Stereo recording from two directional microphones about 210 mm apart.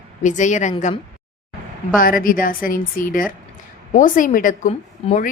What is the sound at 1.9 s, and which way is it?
A woman's voice, 40° left (ahead or behind).